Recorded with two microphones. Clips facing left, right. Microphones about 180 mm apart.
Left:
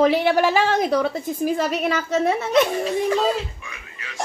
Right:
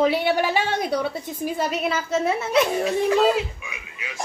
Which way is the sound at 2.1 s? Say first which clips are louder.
Left 2 dB; 40° left (ahead or behind).